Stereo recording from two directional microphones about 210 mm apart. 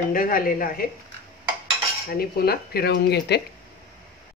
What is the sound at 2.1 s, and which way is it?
Speech, 45° left (ahead or behind).